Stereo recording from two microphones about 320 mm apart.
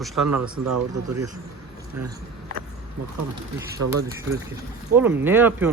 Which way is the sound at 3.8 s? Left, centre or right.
Right.